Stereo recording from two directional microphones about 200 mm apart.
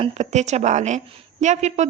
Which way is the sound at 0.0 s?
35° right (ahead or behind).